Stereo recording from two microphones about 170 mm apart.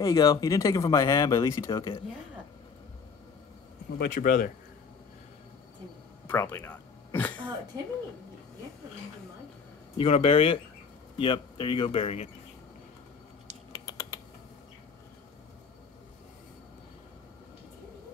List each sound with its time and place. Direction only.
0.0 s speech: 20° left (ahead or behind)
4.0 s speech: 55° left (ahead or behind)
6.2 s throat clearing: 15° left (ahead or behind)
7.7 s speech: 25° right (ahead or behind)
9.9 s speech: 35° left (ahead or behind)